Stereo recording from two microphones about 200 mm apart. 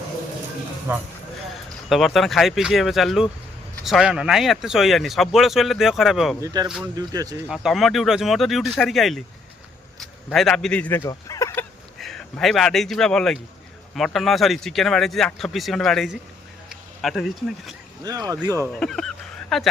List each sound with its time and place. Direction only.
0.9 s speech: 10° right (ahead or behind)
1.9 s speech: centre (ahead or behind)
6.4 s speech: 20° right (ahead or behind)
7.4 s speech: centre (ahead or behind); by 11.6 s 15° left (ahead or behind)
11.9 s speech: centre (ahead or behind)
16.6 s a sound: centre (ahead or behind)
18.0 s speech: 20° right (ahead or behind)
18.5 s speech: 10° left (ahead or behind)